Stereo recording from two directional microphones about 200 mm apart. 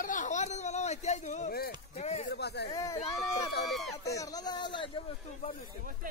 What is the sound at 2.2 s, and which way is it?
Speech, 55° left (ahead or behind).